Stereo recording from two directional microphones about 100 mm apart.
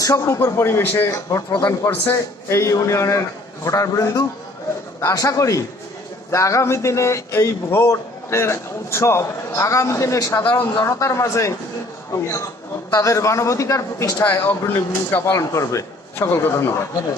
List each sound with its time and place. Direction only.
0.0 s a man's voice: 30° left (ahead or behind)
1.1 s a man's voice: 35° left (ahead or behind)
1.9 s a man's voice: 25° left (ahead or behind)
10.4 s speech: 20° left (ahead or behind)
12.9 s a man's voice: 30° left (ahead or behind)
14.3 s speech: 20° left (ahead or behind)